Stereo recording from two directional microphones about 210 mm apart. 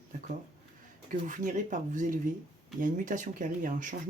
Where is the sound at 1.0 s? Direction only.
40° right (ahead or behind).